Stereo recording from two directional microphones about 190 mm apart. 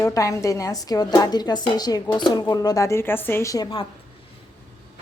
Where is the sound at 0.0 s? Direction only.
15° left (ahead or behind).